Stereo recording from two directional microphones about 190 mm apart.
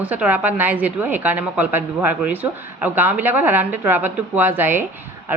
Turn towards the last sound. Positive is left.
turn(degrees=-10)  # may be behind; listen again after turning